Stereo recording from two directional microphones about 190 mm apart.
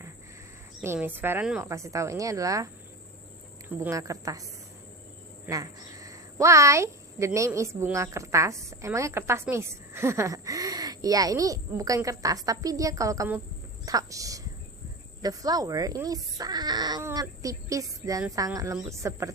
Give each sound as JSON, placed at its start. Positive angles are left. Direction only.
{"t": 0.8, "sound": "speech", "side_deg": -10}
{"t": 3.8, "sound": "speech", "side_deg": -15}
{"t": 5.5, "sound": "speech", "side_deg": -15}